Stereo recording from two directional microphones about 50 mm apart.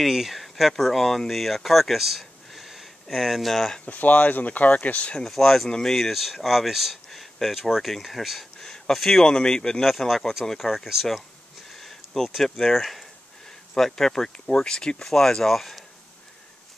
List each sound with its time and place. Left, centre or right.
0.0 s speech: centre
3.8 s speech: left
5.1 s speech: centre
8.5 s a sound: centre
9.3 s speech: centre
9.8 s speech: centre
10.7 s speech: centre